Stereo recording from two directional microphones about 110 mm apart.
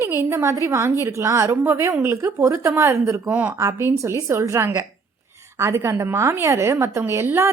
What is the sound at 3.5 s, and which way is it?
Speech, 25° right (ahead or behind).